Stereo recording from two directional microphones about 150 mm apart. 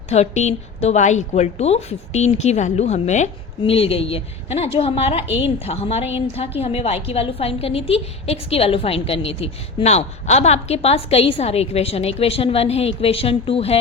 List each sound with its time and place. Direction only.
0.1 s a woman's voice: 45° left (ahead or behind)